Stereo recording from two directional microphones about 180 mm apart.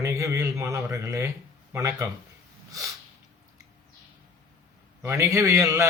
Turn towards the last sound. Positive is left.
turn(degrees=-20)  # may be behind; listen again after turning